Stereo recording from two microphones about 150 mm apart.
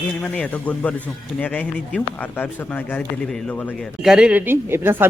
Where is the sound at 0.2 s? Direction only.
5° left (ahead or behind).